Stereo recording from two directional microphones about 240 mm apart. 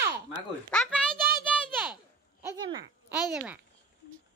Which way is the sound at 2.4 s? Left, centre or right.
Centre.